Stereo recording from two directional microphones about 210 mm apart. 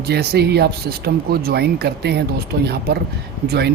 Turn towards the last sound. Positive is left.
turn(degrees=-50)  # may be behind; listen again after turning